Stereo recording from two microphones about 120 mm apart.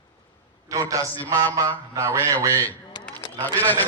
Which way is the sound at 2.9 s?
35° left (ahead or behind).